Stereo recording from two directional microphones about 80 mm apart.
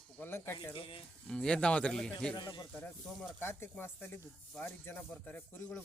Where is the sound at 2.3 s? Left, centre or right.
Left.